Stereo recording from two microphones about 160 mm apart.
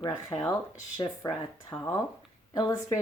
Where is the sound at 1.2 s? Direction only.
20° left (ahead or behind).